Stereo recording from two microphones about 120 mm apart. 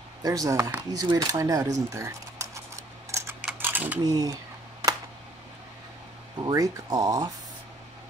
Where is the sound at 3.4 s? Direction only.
15° right (ahead or behind).